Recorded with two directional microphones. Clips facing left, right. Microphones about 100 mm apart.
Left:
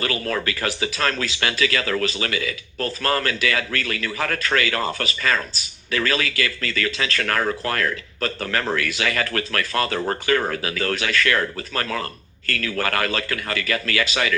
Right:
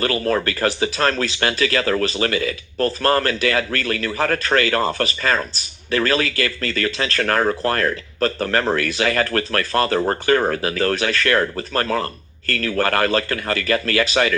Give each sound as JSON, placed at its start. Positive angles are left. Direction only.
{"t": 0.0, "sound": "speech", "side_deg": -35}